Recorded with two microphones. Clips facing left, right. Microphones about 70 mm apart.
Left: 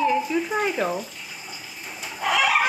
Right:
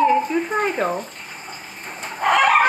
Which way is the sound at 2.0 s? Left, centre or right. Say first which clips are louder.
Right 6 dB; right.